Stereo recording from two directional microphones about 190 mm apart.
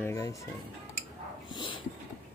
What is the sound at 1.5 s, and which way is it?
Dog, 25° left (ahead or behind).